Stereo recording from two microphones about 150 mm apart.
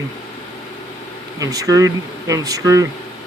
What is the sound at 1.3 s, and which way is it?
Speech, 25° right (ahead or behind).